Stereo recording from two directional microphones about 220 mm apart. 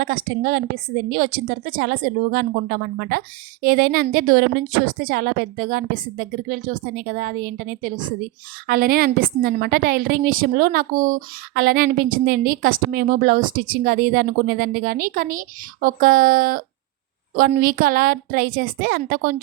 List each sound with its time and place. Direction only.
0.0 s a woman's voice: 40° right (ahead or behind)